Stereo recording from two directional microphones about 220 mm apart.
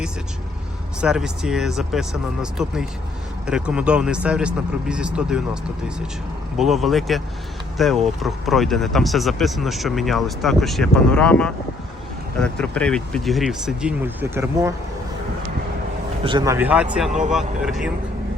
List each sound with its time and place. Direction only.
1.0 s speech: 5° right (ahead or behind)
6.6 s speech: centre (ahead or behind)
16.2 s speech: 20° right (ahead or behind)
17.1 s speech: 35° right (ahead or behind)
17.3 s speech: centre (ahead or behind)